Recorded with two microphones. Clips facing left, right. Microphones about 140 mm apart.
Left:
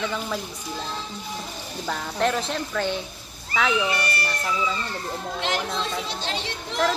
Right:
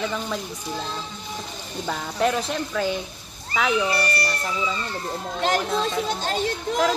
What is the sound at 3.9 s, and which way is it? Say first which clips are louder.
Speech: right 3 dB; 35° right (ahead or behind).